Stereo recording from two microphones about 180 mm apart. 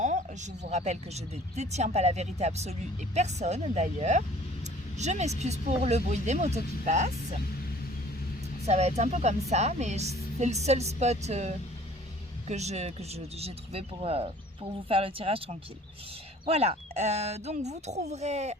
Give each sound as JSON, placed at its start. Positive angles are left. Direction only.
{"t": 0.0, "sound": "speech", "side_deg": -45}
{"t": 8.6, "sound": "speech", "side_deg": -35}